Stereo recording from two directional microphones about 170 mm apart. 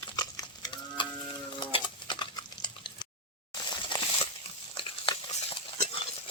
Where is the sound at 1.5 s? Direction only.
30° left (ahead or behind).